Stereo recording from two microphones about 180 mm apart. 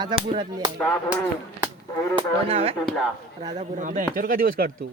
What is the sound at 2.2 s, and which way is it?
Speech, 35° right (ahead or behind).